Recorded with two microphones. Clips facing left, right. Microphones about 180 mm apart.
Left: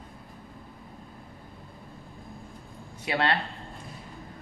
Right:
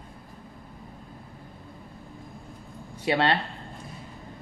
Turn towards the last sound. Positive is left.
turn(degrees=-25)  # may be behind; listen again after turning